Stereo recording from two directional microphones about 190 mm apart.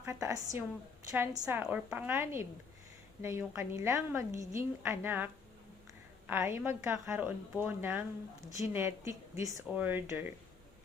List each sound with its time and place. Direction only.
0.0 s a woman's voice: 15° right (ahead or behind)